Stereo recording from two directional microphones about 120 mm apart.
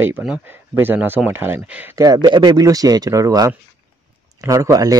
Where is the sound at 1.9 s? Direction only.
30° right (ahead or behind).